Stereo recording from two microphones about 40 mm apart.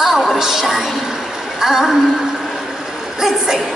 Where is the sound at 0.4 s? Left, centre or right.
Centre.